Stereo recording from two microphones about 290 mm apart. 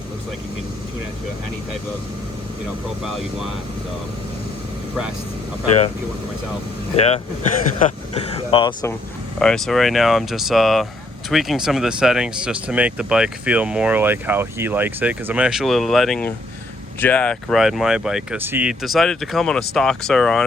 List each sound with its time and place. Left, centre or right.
6.9 s speech: left
9.4 s speech: centre